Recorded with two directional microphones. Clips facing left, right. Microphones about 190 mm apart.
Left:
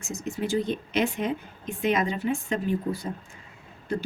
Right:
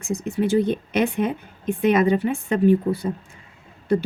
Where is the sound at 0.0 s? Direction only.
60° right (ahead or behind).